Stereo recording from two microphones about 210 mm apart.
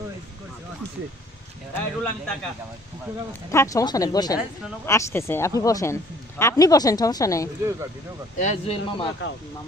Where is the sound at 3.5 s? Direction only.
15° left (ahead or behind).